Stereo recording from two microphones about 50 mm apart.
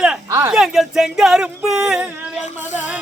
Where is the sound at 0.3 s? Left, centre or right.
Right.